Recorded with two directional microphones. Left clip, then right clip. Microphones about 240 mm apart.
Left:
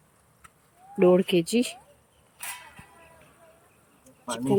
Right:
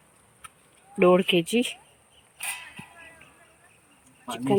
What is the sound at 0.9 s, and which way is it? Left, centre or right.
Speech, centre.